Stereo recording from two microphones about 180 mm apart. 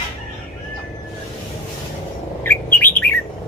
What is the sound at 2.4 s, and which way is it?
Bird, 10° left (ahead or behind).